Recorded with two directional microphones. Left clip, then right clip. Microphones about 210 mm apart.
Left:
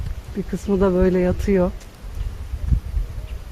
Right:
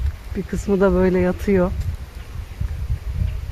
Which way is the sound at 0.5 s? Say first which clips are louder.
Right 2 dB; 50° right (ahead or behind).